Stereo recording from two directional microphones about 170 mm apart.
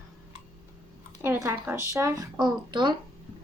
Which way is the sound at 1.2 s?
15° right (ahead or behind).